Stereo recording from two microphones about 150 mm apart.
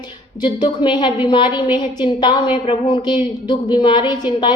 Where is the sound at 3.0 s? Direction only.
30° left (ahead or behind).